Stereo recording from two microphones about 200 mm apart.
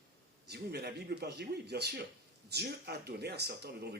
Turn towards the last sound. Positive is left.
turn(degrees=-55)  # may be behind; listen again after turning